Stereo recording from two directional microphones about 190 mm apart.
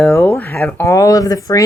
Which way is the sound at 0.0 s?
10° left (ahead or behind).